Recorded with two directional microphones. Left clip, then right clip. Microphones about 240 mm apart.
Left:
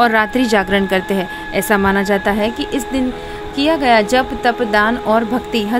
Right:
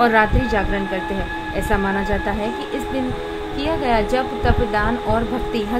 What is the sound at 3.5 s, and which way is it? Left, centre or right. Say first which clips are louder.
A woman's voice: left 7 dB; left.